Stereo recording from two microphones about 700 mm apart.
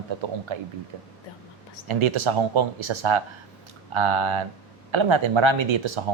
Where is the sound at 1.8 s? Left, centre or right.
Right.